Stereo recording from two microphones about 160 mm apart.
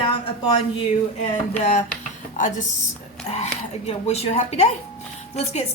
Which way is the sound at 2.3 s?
50° left (ahead or behind).